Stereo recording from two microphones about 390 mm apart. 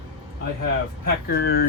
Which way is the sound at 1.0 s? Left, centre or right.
Left.